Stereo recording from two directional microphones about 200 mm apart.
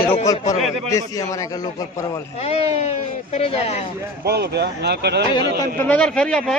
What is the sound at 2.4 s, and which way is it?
Speech, 30° left (ahead or behind).